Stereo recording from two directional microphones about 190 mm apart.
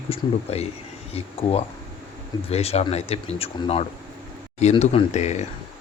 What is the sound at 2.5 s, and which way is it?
Speech, 35° left (ahead or behind).